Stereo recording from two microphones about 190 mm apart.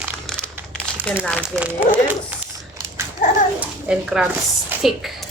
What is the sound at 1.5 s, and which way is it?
Speech, 10° right (ahead or behind).